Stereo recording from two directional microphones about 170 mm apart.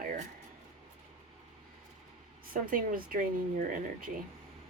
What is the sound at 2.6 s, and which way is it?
Speech, 55° right (ahead or behind).